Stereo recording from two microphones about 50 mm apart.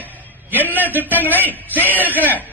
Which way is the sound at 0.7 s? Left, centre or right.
Right.